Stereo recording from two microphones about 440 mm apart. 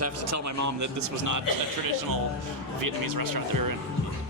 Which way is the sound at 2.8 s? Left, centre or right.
Right.